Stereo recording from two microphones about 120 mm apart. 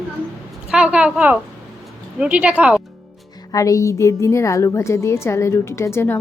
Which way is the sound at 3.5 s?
30° left (ahead or behind).